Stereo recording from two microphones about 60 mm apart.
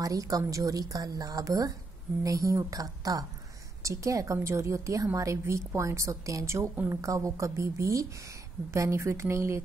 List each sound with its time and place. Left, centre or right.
0.0 s speech: right
0.5 s speech: right
3.8 s a woman's voice: right